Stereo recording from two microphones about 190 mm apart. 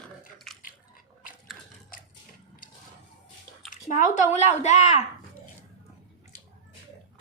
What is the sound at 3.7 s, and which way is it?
Speech, 45° left (ahead or behind).